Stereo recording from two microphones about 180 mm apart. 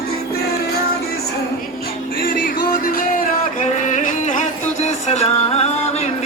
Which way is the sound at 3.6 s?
45° left (ahead or behind).